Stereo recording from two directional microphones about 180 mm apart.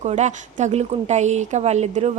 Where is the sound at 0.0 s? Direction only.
40° right (ahead or behind).